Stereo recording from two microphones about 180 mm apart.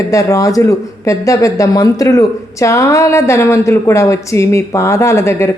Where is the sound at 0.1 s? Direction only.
20° left (ahead or behind).